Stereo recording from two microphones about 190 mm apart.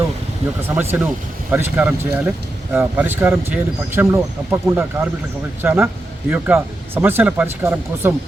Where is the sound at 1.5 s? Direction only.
10° right (ahead or behind).